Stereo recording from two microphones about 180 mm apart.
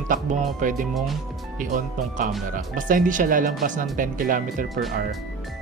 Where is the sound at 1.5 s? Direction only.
45° right (ahead or behind).